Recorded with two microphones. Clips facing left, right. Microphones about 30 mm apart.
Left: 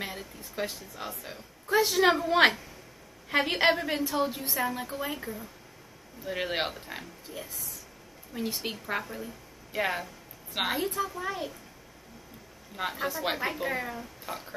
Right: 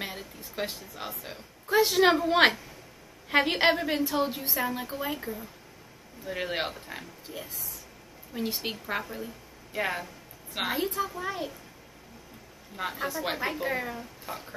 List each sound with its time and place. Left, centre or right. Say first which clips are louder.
0.0 s a sound: even; centre
0.7 s a woman's voice: even; centre
4.1 s a woman's voice: right 1 dB; centre
4.6 s a woman's voice: even; centre
6.2 s a woman's voice: left 1 dB; centre
7.2 s a woman's voice: right 1 dB; right
8.7 s a woman's voice: even; centre
12.7 s a woman's voice: even; centre